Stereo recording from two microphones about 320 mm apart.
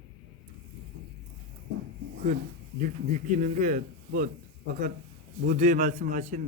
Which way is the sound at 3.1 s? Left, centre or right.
Right.